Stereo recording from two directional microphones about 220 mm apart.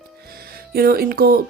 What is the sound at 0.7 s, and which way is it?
Speech, 45° right (ahead or behind).